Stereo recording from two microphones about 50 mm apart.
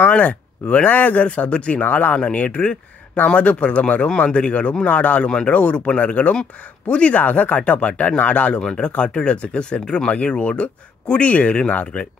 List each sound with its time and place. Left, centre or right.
0.0 s speech: left
2.1 s speech: left